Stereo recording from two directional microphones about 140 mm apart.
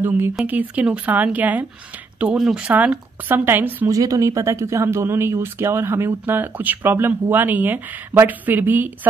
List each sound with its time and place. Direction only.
0.0 s a woman's voice: 15° right (ahead or behind)